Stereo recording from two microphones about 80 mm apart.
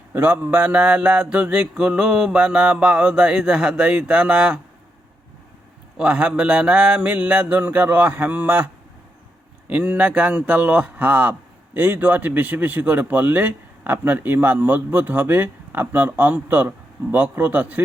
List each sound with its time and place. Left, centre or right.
0.1 s mantra: right
6.0 s a man's voice: centre
9.7 s a man's voice: centre